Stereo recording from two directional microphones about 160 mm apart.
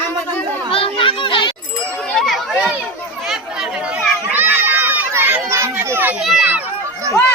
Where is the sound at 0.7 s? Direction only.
35° left (ahead or behind).